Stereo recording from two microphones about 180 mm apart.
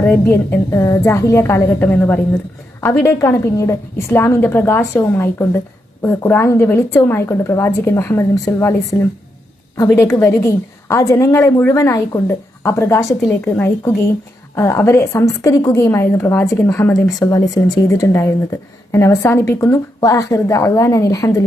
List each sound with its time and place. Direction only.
0.1 s a woman's voice: 10° left (ahead or behind)